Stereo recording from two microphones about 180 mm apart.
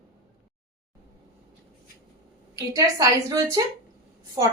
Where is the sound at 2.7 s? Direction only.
20° right (ahead or behind).